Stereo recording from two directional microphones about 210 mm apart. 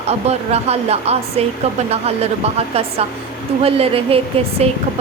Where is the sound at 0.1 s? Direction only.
30° right (ahead or behind).